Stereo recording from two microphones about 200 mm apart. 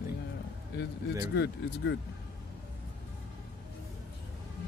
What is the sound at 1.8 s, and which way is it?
Speech, 60° left (ahead or behind).